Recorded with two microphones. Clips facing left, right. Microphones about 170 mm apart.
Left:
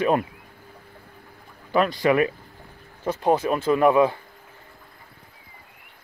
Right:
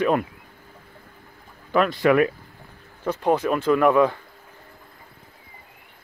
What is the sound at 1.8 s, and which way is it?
Speech, 5° left (ahead or behind).